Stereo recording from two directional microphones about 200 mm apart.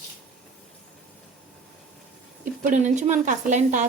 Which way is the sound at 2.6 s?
35° right (ahead or behind).